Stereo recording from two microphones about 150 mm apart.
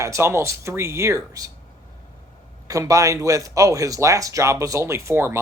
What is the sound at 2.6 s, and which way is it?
Speech, 20° right (ahead or behind).